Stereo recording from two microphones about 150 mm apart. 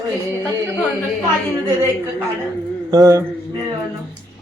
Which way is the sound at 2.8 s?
25° right (ahead or behind).